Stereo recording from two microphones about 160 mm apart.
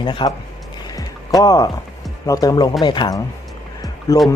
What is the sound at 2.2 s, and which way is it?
Speech, 20° left (ahead or behind).